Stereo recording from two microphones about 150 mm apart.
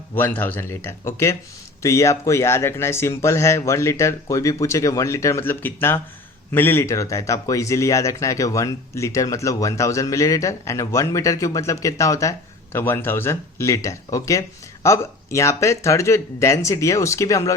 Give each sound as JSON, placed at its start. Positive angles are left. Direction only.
{"t": 0.1, "sound": "speech", "side_deg": 15}